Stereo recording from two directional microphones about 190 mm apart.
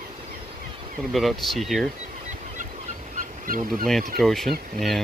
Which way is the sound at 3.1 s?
45° right (ahead or behind).